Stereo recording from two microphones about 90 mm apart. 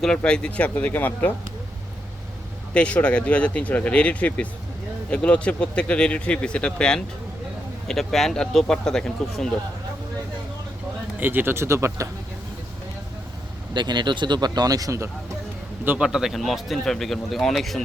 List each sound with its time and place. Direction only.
0.0 s speech: 10° left (ahead or behind)
2.7 s speech: 10° left (ahead or behind)
11.2 s speech: 20° right (ahead or behind)
13.7 s speech: 55° right (ahead or behind); by 15.1 s 35° right (ahead or behind)
16.0 s speech: 5° right (ahead or behind)